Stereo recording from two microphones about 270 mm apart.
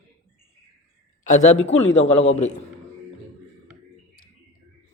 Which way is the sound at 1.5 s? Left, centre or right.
Left.